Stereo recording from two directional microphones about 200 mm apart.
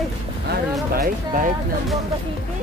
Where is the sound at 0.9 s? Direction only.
45° right (ahead or behind).